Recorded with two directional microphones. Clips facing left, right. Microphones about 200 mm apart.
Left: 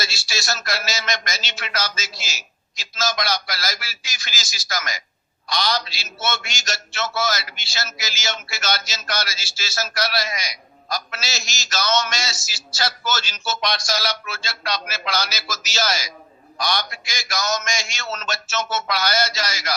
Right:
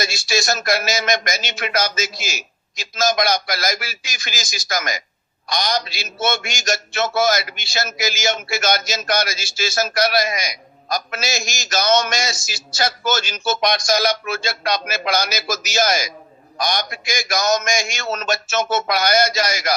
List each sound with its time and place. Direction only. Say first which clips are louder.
0.0 s a man's voice: right 8 dB; 50° right (ahead or behind)